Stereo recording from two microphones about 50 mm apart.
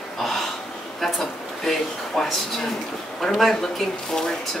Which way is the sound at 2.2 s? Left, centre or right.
Centre.